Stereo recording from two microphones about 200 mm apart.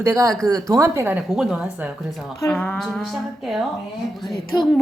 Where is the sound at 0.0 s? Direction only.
15° right (ahead or behind); by 3.6 s centre (ahead or behind).